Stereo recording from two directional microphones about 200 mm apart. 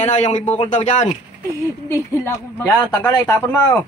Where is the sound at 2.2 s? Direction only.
10° left (ahead or behind).